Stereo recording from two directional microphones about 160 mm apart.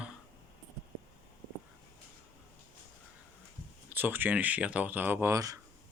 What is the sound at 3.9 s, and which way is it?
Speech, 10° right (ahead or behind).